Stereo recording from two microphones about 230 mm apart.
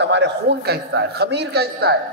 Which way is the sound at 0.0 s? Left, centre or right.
Right.